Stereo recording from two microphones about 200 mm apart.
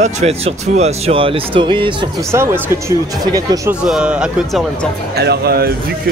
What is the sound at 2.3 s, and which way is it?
Speech, 15° right (ahead or behind).